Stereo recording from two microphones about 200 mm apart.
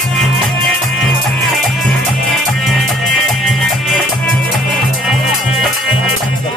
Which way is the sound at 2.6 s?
Centre (ahead or behind).